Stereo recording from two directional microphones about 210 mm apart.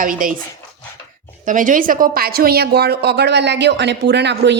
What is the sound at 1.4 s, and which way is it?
A woman's voice, 40° right (ahead or behind).